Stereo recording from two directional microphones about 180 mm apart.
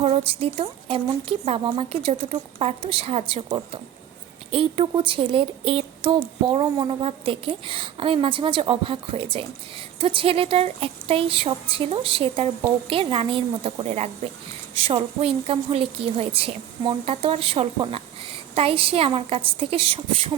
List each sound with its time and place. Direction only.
0.0 s a woman's voice: 35° right (ahead or behind)